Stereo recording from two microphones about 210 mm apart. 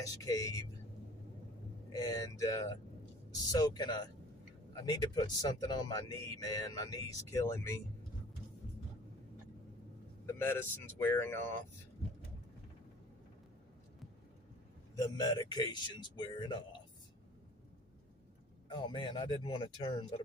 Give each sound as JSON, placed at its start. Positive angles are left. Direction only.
{"t": 0.0, "sound": "speech", "side_deg": 15}
{"t": 1.9, "sound": "speech", "side_deg": 20}
{"t": 10.2, "sound": "speech", "side_deg": 10}
{"t": 15.2, "sound": "speech", "side_deg": 20}
{"t": 18.7, "sound": "speech", "side_deg": 20}